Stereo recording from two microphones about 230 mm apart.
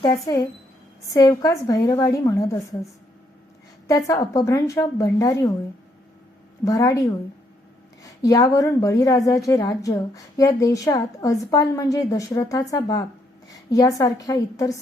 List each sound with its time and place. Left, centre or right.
0.3 s a woman's voice: centre
6.7 s a woman's voice: centre
8.2 s a woman's voice: centre